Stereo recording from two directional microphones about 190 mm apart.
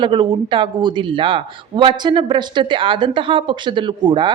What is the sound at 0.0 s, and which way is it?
Speech, 25° right (ahead or behind).